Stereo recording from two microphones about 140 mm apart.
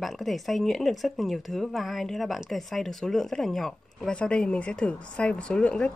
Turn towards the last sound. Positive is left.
turn(degrees=5)  # may be behind; listen again after turning